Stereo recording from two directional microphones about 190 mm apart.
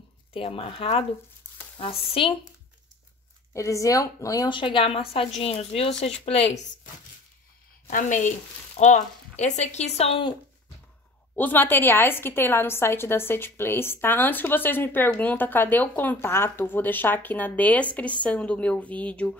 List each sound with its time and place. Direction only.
0.3 s a woman's voice: 30° left (ahead or behind)
3.5 s a woman's voice: 15° left (ahead or behind); by 6.6 s 35° left (ahead or behind)
7.9 s speech: 40° left (ahead or behind)
11.3 s a woman's voice: 10° left (ahead or behind)